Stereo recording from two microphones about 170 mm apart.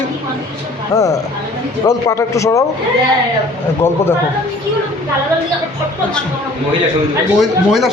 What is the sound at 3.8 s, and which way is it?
Speech, 15° left (ahead or behind).